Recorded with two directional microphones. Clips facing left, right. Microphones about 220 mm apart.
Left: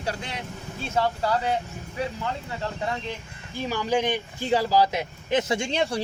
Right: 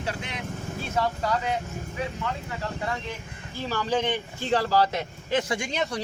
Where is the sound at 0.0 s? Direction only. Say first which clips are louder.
Left 1 dB; 35° left (ahead or behind).